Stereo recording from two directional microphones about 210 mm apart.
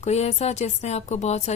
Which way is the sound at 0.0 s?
30° left (ahead or behind).